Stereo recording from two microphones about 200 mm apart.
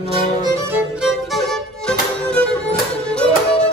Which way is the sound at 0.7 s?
5° right (ahead or behind).